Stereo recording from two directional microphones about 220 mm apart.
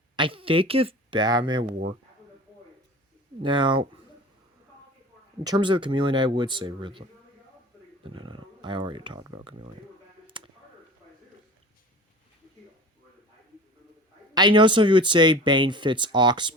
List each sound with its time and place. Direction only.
0.2 s speech: 25° right (ahead or behind)
3.4 s speech: 20° right (ahead or behind)
5.4 s speech: 20° right (ahead or behind)
8.0 s speech: 20° right (ahead or behind)
10.3 s a sound: 20° right (ahead or behind)
14.3 s speech: 20° right (ahead or behind)